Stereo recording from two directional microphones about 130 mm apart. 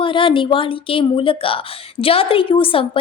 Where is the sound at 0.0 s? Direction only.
40° left (ahead or behind).